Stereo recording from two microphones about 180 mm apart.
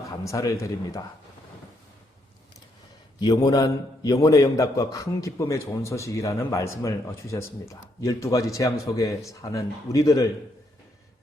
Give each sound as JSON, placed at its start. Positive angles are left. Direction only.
{"t": 0.3, "sound": "speech", "side_deg": 15}
{"t": 3.2, "sound": "a man's voice", "side_deg": 20}